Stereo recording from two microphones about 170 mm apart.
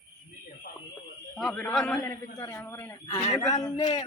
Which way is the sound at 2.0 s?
20° left (ahead or behind).